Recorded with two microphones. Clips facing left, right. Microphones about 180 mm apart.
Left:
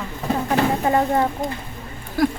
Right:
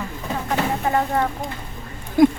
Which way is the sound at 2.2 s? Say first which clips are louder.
Right 6 dB; 20° right (ahead or behind).